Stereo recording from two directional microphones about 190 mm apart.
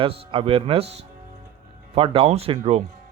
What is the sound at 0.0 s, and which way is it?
Speech, 30° right (ahead or behind).